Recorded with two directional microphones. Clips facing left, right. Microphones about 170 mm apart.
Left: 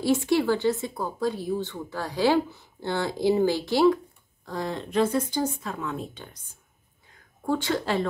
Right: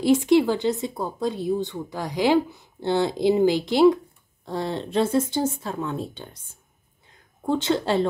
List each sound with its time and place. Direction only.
0.0 s speech: 15° right (ahead or behind)
7.4 s speech: 20° right (ahead or behind)